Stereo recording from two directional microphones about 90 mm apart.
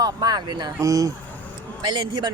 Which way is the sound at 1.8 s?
55° right (ahead or behind).